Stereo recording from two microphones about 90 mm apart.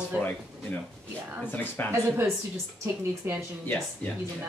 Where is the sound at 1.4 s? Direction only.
20° left (ahead or behind).